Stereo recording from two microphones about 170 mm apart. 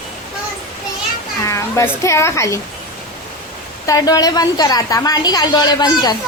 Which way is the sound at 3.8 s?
20° left (ahead or behind).